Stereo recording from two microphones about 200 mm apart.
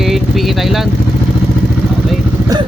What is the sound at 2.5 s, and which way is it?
Vehicle, 20° right (ahead or behind).